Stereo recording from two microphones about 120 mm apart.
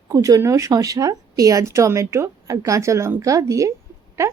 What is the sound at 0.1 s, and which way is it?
A woman's voice, 30° right (ahead or behind).